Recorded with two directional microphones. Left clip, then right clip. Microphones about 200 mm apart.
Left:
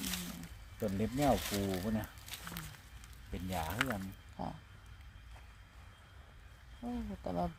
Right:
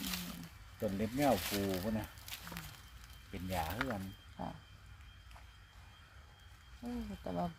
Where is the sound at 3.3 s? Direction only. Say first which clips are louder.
Left 2 dB; 30° left (ahead or behind).